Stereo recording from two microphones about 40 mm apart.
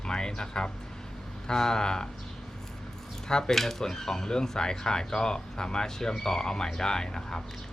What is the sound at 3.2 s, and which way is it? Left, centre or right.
Speech, centre.